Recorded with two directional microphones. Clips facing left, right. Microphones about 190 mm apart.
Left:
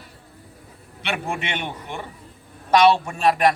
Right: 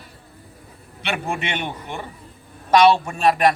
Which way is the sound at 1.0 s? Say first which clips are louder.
Right 1 dB; 35° right (ahead or behind).